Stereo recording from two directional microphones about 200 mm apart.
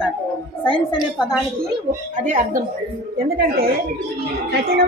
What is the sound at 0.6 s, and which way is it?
Speech, 25° left (ahead or behind).